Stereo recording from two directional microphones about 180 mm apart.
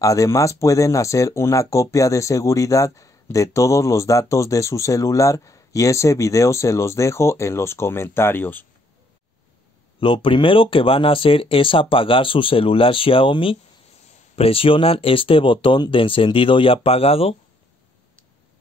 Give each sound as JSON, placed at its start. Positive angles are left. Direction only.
{"t": 0.0, "sound": "speech", "side_deg": 20}
{"t": 9.9, "sound": "speech", "side_deg": 30}